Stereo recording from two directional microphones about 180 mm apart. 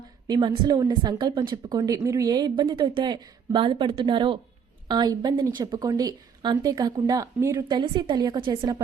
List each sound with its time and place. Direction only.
0.3 s speech: 25° right (ahead or behind)